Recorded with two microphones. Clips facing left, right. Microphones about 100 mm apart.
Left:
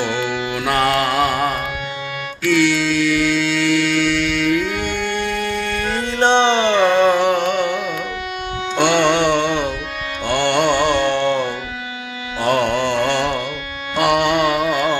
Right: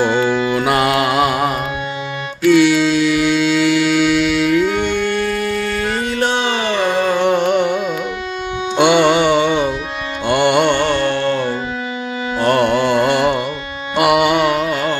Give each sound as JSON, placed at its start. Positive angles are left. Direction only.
{"t": 0.0, "sound": "mantra", "side_deg": -45}
{"t": 0.6, "sound": "mantra", "side_deg": -10}
{"t": 4.7, "sound": "music", "side_deg": -20}
{"t": 4.9, "sound": "music", "side_deg": 20}
{"t": 6.1, "sound": "a sound", "side_deg": 30}
{"t": 7.2, "sound": "music", "side_deg": 0}
{"t": 10.7, "sound": "music", "side_deg": 15}
{"t": 12.5, "sound": "music", "side_deg": -5}